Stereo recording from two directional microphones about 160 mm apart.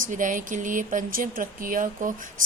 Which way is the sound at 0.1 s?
55° right (ahead or behind).